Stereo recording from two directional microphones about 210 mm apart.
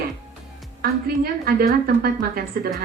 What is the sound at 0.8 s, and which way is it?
A woman's voice, 45° right (ahead or behind).